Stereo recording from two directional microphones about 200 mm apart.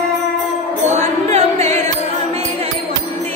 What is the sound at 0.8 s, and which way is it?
Music, 35° right (ahead or behind).